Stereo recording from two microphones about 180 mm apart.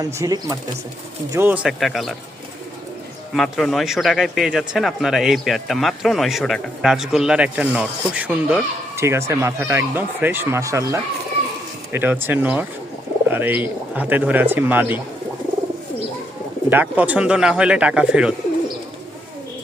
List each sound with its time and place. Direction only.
0.0 s speech: 20° right (ahead or behind); by 2.1 s centre (ahead or behind)
3.3 s speech: centre (ahead or behind)
16.6 s speech: 10° right (ahead or behind)